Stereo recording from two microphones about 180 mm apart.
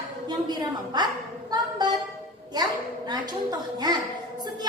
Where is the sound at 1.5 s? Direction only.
20° right (ahead or behind).